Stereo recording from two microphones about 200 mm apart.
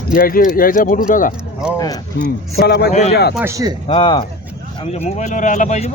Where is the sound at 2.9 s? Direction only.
35° left (ahead or behind).